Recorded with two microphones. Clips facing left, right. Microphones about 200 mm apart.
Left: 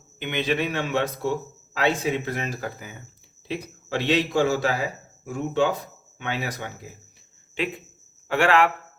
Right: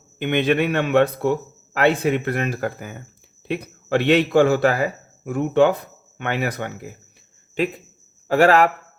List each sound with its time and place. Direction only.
0.2 s a man's voice: 55° right (ahead or behind)
7.6 s a man's voice: 40° right (ahead or behind)